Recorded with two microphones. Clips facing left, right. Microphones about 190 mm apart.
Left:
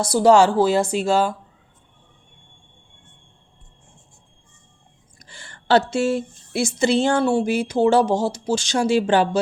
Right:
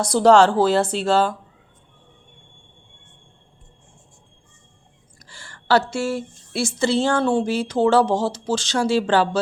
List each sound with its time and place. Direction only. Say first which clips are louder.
0.0 s speech: even; 10° left (ahead or behind)
5.2 s a sound: left 1 dB; 20° left (ahead or behind)
6.6 s speech: left 1 dB; 15° left (ahead or behind)